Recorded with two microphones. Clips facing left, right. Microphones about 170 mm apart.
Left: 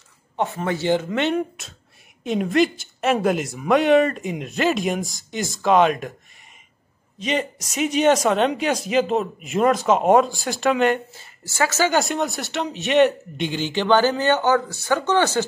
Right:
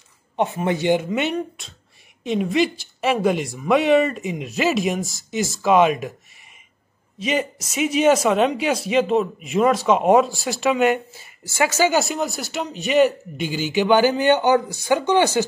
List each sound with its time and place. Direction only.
0.4 s speech: 15° right (ahead or behind)
2.2 s a man's voice: centre (ahead or behind)
7.2 s a man's voice: 5° right (ahead or behind)
12.0 s a man's voice: centre (ahead or behind)